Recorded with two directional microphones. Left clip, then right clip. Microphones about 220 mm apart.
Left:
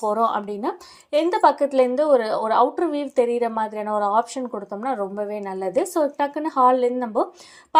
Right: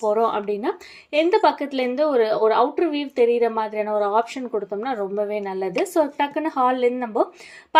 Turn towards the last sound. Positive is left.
turn(degrees=20)  # may be behind; listen again after turning